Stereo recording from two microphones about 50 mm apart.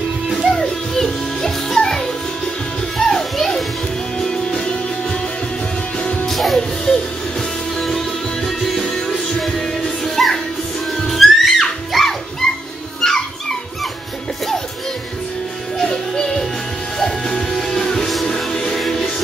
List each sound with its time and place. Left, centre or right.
0.5 s music: centre
3.0 s children playing: centre
4.2 s music: centre
6.2 s music: centre
6.9 s music: centre
8.5 s music: centre
13.0 s dog: centre
15.8 s music: centre